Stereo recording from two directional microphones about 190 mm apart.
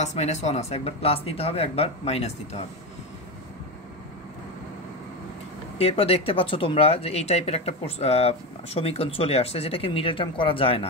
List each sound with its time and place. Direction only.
0.0 s speech: 35° left (ahead or behind)
5.8 s speech: 30° left (ahead or behind)